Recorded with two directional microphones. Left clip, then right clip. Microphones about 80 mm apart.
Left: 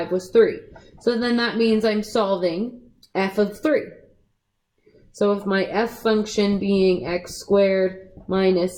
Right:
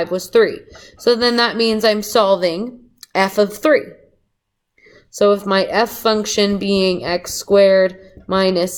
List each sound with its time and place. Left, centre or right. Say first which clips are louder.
0.4 s a woman's voice: right 2 dB; right
5.1 s a woman's voice: right 7 dB; right